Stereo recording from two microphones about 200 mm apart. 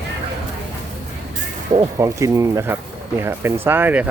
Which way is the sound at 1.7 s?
15° right (ahead or behind).